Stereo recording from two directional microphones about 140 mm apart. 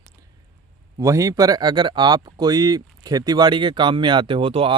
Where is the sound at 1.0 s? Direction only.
20° right (ahead or behind); by 4.7 s 40° right (ahead or behind).